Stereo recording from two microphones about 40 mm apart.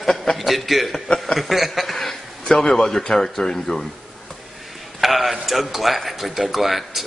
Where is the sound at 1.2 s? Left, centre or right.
Centre.